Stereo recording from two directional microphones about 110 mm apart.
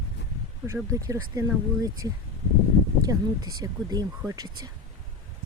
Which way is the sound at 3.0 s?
35° right (ahead or behind).